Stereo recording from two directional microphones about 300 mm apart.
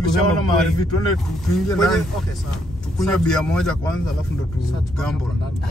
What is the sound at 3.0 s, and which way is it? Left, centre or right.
Speech, centre.